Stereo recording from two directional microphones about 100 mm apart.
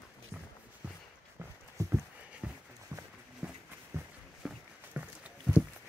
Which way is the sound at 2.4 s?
10° right (ahead or behind).